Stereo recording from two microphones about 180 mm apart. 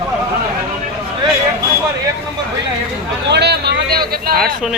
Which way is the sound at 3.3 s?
65° right (ahead or behind).